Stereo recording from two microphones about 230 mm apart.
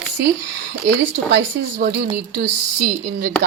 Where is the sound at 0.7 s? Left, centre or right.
Right.